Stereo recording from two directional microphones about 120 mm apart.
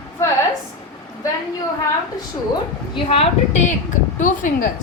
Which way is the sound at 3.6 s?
90° left.